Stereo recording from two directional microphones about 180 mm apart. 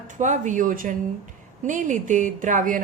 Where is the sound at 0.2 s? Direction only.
45° right (ahead or behind).